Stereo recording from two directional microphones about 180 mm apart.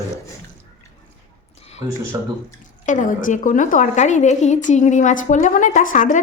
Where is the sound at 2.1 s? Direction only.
20° right (ahead or behind).